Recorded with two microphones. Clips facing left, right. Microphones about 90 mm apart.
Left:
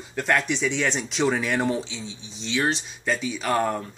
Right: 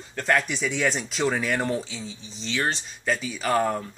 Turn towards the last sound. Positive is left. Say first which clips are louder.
# even
turn(degrees=0)  # may be behind; listen again after turning